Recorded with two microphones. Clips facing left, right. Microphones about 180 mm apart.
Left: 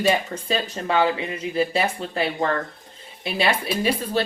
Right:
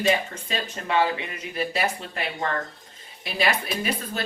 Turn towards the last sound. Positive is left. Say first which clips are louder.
# left 6 dB
turn(degrees=30)  # may be behind; listen again after turning